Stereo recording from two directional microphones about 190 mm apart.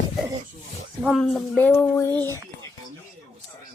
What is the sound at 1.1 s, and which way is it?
Speech, centre (ahead or behind).